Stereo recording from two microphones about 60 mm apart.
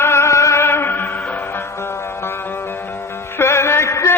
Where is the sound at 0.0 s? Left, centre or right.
Left.